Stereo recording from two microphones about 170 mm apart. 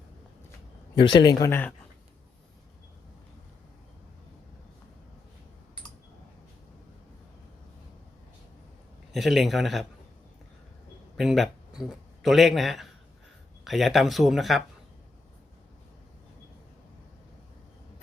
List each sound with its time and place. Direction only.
1.1 s speech: 25° left (ahead or behind)
9.1 s speech: centre (ahead or behind)
11.2 s a man's voice: centre (ahead or behind)